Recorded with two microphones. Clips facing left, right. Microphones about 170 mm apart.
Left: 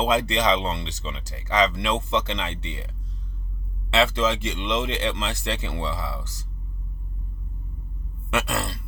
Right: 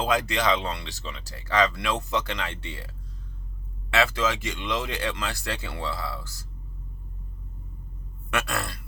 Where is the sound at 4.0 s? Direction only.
25° left (ahead or behind).